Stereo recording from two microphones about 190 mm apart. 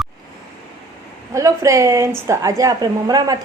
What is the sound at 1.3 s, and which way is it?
A woman's voice, 15° right (ahead or behind).